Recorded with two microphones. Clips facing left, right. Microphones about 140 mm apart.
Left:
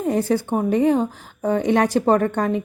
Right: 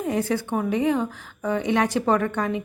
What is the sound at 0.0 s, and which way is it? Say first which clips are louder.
A woman's voice: left 4 dB; 35° left (ahead or behind).